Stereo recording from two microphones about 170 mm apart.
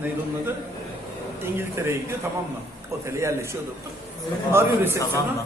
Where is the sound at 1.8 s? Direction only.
15° right (ahead or behind).